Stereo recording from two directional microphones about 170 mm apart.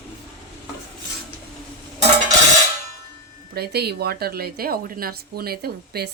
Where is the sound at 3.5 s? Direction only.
70° right (ahead or behind).